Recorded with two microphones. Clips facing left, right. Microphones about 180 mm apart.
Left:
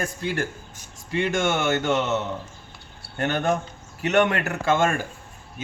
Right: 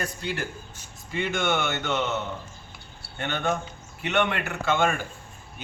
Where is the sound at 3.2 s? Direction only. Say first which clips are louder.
Left 4 dB; 45° left (ahead or behind).